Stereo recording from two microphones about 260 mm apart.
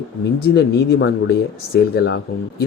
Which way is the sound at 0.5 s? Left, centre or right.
Left.